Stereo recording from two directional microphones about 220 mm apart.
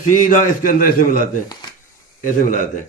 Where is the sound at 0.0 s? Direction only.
35° left (ahead or behind).